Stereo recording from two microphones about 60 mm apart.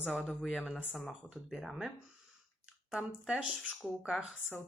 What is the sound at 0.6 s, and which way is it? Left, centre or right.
Speech, centre.